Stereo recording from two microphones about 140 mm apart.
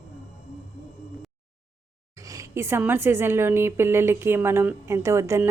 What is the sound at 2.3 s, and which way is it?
A woman's voice, 20° right (ahead or behind).